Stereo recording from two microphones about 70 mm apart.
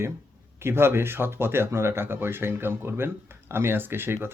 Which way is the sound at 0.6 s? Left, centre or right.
Right.